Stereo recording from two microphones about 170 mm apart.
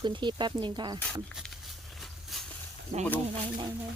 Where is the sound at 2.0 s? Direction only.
Centre (ahead or behind).